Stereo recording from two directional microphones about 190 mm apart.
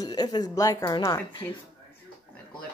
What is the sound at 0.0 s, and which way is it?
Speech, 20° left (ahead or behind).